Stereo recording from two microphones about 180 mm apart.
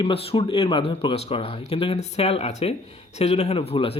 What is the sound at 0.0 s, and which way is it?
Speech, 30° left (ahead or behind).